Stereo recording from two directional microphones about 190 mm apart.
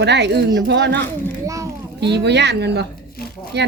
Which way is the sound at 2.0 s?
65° right (ahead or behind).